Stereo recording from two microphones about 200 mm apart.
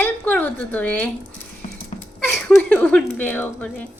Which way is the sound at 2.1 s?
10° left (ahead or behind).